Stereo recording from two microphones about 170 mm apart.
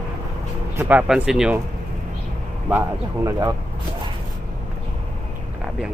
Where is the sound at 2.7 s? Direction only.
15° right (ahead or behind).